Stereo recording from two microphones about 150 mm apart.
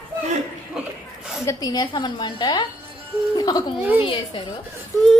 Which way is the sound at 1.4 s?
20° left (ahead or behind).